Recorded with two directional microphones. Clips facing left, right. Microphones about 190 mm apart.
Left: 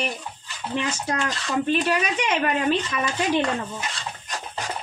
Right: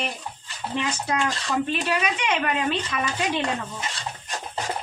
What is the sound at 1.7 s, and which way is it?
Speech, 40° left (ahead or behind).